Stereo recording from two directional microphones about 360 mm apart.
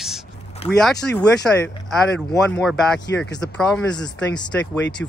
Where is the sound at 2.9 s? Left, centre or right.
Left.